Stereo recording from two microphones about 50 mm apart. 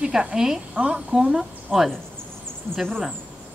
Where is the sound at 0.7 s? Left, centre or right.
Right.